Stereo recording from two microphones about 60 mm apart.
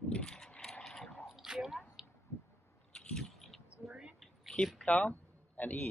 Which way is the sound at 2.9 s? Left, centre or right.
Centre.